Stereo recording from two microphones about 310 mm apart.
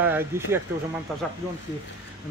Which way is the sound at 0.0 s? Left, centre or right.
Centre.